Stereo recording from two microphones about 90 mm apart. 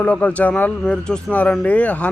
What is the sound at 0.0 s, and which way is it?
Speech, 15° left (ahead or behind).